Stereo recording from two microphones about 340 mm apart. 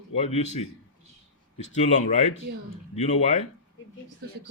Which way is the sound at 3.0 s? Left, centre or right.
Centre.